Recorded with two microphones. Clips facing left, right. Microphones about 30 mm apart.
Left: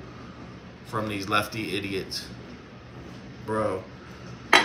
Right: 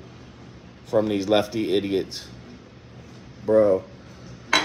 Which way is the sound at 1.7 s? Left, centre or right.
Centre.